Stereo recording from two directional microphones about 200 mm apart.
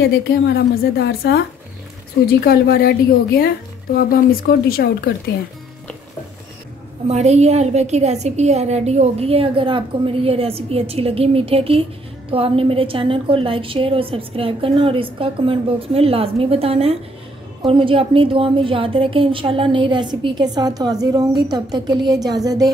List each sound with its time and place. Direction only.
0.5 s a woman's voice: 55° left (ahead or behind)
2.4 s speech: 50° left (ahead or behind)
7.1 s a woman's voice: 30° right (ahead or behind)